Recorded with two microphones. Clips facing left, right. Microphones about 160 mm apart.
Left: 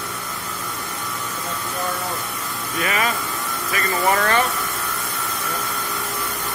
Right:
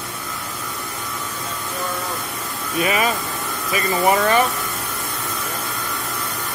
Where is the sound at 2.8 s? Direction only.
20° right (ahead or behind).